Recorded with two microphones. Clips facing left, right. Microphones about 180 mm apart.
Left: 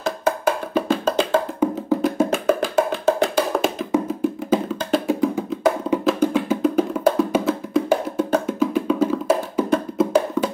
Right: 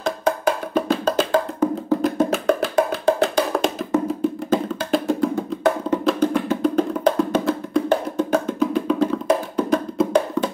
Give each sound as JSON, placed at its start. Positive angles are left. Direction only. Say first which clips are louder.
{"t": 0.0, "sound": "wood block", "louder": "even", "side_deg": 5}
{"t": 3.9, "sound": "music", "louder": "right 1 dB", "side_deg": 5}